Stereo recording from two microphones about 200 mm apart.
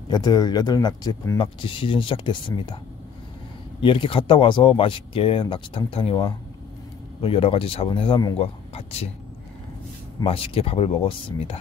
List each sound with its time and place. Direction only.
0.1 s speech: 20° left (ahead or behind)
3.8 s speech: 25° left (ahead or behind)
8.4 s a sound: 30° left (ahead or behind)
10.2 s speech: 30° left (ahead or behind)